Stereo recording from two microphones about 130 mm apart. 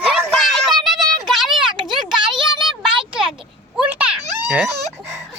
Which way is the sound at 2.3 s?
40° right (ahead or behind).